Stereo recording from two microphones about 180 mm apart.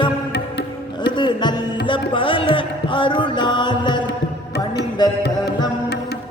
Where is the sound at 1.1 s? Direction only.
25° left (ahead or behind).